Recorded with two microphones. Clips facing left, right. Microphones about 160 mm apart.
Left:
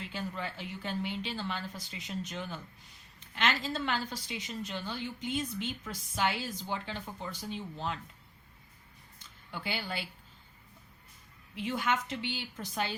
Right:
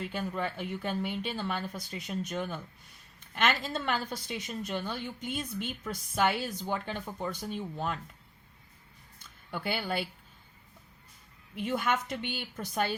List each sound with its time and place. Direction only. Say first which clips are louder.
0.0 s a woman's voice: right 5 dB; 50° right (ahead or behind)
9.5 s a woman's voice: right 5 dB; 50° right (ahead or behind)
11.5 s a woman's voice: right 2 dB; 50° right (ahead or behind)